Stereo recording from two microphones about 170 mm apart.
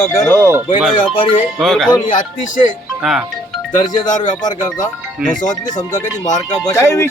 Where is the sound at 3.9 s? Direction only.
45° left (ahead or behind).